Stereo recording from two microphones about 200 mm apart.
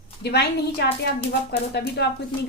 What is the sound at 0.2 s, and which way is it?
A woman's voice, 55° left (ahead or behind).